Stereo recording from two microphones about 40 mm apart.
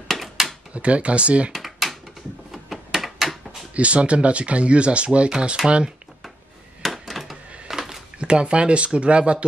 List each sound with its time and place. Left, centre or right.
0.1 s drawer open or close: centre
0.7 s speech: right
1.5 s typing: centre
2.5 s a sound: centre
3.7 s speech: right
6.8 s a sound: centre
8.2 s speech: right